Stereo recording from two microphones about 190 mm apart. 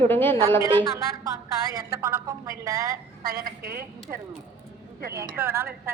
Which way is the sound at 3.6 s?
50° right (ahead or behind).